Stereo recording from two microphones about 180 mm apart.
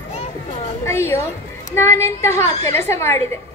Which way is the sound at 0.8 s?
15° left (ahead or behind).